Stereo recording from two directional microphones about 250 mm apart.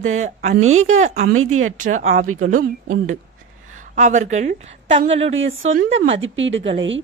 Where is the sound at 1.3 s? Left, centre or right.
Right.